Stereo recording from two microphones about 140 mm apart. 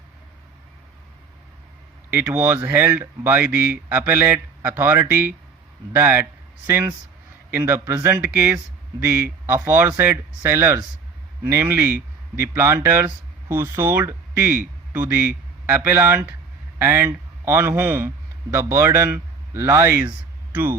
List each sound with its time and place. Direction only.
2.0 s a man's voice: 15° right (ahead or behind)